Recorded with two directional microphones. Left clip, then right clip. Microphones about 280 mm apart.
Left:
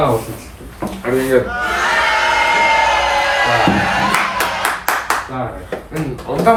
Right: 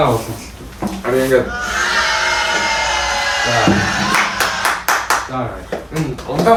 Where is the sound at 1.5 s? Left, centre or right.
Centre.